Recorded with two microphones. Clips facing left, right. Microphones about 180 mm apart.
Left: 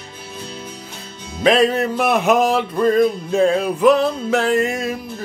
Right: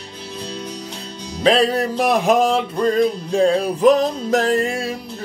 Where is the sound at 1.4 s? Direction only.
35° right (ahead or behind).